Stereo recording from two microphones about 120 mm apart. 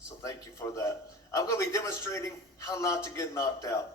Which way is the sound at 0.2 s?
25° left (ahead or behind).